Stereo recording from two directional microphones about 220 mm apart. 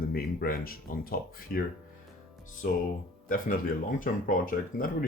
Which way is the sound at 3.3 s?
35° left (ahead or behind).